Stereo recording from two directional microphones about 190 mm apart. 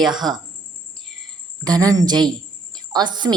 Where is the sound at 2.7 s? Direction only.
20° right (ahead or behind).